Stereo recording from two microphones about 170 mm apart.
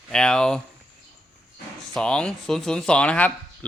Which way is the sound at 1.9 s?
5° left (ahead or behind).